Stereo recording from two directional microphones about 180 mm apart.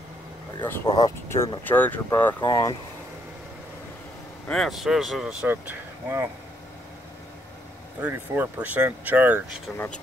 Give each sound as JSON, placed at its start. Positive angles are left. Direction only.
{"t": 0.8, "sound": "speech", "side_deg": 20}
{"t": 2.4, "sound": "speech", "side_deg": 25}
{"t": 4.5, "sound": "speech", "side_deg": 0}
{"t": 8.0, "sound": "speech", "side_deg": -10}